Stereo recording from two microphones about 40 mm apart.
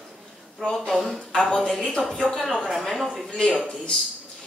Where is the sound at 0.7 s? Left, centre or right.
Centre.